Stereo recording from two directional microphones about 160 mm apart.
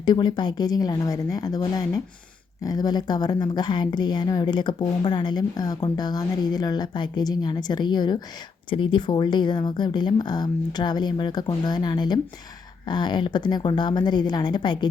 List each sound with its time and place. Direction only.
0.0 s a woman's voice: 30° left (ahead or behind)